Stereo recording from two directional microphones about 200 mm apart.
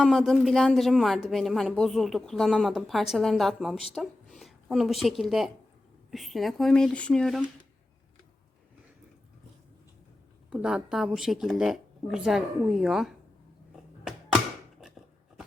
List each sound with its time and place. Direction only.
0.0 s a woman's voice: centre (ahead or behind)
10.5 s speech: 5° right (ahead or behind)